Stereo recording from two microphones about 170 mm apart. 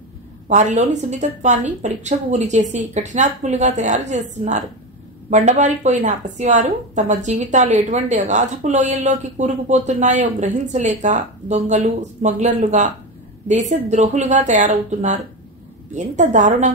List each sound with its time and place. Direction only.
0.5 s a woman's voice: 45° right (ahead or behind)